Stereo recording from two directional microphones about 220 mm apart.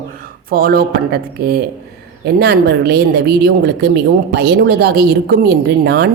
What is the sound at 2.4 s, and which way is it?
A woman's voice, 45° right (ahead or behind).